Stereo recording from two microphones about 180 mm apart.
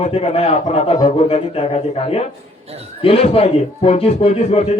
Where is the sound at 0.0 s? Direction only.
35° left (ahead or behind).